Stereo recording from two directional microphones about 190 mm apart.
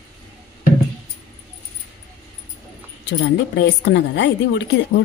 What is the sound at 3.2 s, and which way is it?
A woman's voice, 70° left (ahead or behind).